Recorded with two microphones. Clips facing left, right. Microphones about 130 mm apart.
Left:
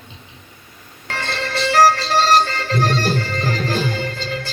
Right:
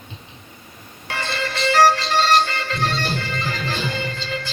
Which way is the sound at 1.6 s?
40° left (ahead or behind).